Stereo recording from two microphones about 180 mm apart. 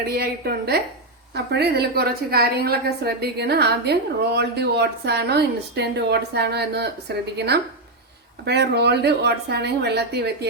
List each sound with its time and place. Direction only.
0.2 s a woman's voice: 60° right (ahead or behind)